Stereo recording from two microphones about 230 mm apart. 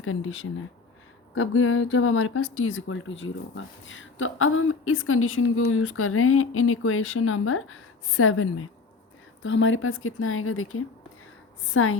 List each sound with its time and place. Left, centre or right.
0.0 s speech: left
9.4 s speech: left